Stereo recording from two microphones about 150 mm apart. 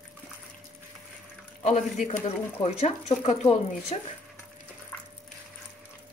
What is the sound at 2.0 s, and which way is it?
Speech, 50° left (ahead or behind).